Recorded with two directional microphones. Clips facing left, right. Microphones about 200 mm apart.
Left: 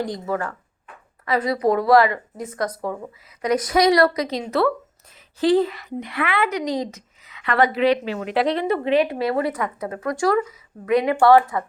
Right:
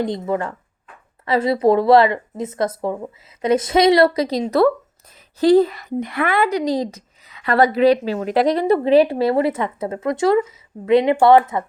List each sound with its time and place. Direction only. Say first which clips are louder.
0.0 s speech: right 4 dB; 20° right (ahead or behind)